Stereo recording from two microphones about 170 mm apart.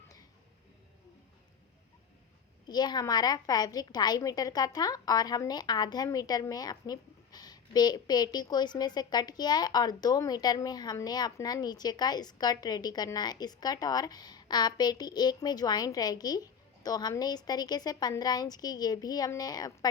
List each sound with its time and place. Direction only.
2.6 s a woman's voice: 25° left (ahead or behind)